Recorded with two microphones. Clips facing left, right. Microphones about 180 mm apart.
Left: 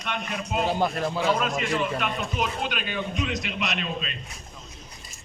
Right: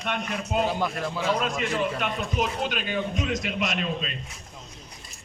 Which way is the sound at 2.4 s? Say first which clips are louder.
Right 3 dB; 40° right (ahead or behind).